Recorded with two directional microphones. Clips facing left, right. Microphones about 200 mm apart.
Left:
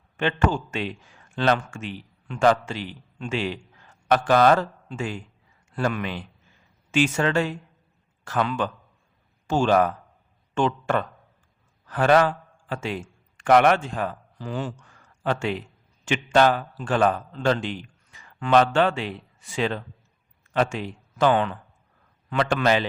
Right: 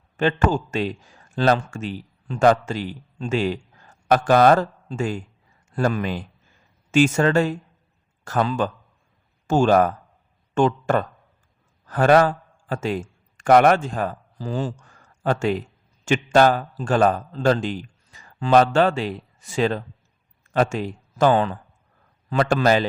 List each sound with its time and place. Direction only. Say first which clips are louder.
0.2 s a man's voice: right 3 dB; 40° right (ahead or behind)